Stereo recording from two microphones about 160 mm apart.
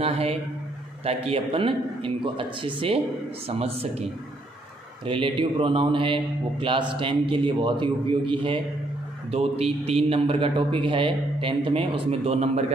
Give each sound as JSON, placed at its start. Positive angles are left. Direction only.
{"t": 0.0, "sound": "a man's voice", "side_deg": -40}
{"t": 5.0, "sound": "a man's voice", "side_deg": -35}